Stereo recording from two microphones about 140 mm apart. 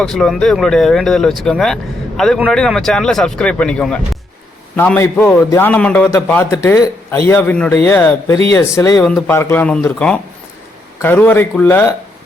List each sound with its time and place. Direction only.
0.0 s speech: 5° left (ahead or behind)
4.8 s a man's voice: 15° left (ahead or behind)
9.0 s speech: 5° left (ahead or behind)
9.3 s a man's voice: 15° left (ahead or behind)
11.0 s a man's voice: 15° left (ahead or behind)